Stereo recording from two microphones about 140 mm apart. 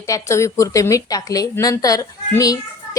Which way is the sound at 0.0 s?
20° left (ahead or behind).